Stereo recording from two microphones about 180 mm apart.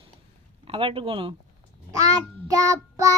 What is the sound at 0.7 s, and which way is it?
Speech, 30° right (ahead or behind).